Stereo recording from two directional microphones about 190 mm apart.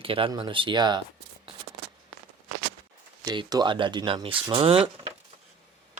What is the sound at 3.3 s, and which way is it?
Speech, 20° right (ahead or behind).